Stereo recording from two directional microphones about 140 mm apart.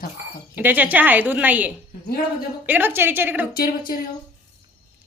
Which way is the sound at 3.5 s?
90° left.